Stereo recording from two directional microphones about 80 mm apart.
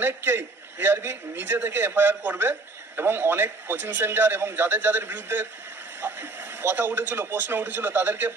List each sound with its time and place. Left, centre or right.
0.0 s speech: right
6.6 s speech: right